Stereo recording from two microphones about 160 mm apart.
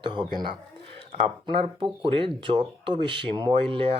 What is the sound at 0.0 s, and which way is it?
Speech, 30° right (ahead or behind).